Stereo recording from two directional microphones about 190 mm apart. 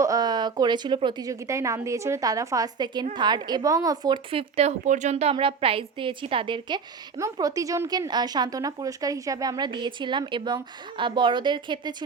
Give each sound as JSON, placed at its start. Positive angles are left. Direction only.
{"t": 0.0, "sound": "speech", "side_deg": -20}